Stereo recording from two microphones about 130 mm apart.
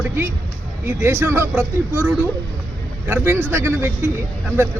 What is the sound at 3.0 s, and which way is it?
Speech, 20° right (ahead or behind).